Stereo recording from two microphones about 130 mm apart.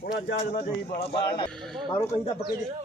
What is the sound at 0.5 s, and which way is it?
Speech, 55° left (ahead or behind).